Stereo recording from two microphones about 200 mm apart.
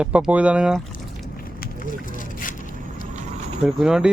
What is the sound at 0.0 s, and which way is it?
Speech, 5° right (ahead or behind).